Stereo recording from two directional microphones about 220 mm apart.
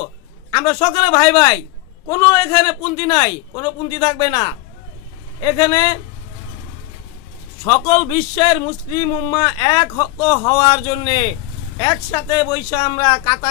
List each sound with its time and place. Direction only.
0.0 s speech: 15° left (ahead or behind)
7.6 s speech: 20° left (ahead or behind)